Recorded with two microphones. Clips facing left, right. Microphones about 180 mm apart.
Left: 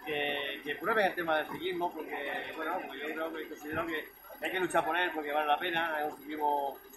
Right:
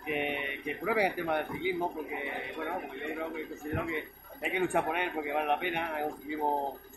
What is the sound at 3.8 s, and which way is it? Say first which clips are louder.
A man's voice: right 2 dB; 5° right (ahead or behind).